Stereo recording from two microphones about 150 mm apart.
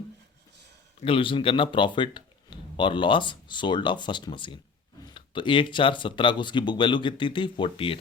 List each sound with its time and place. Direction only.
1.0 s speech: 35° left (ahead or behind)